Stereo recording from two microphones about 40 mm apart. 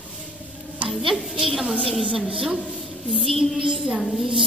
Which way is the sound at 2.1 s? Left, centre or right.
Centre.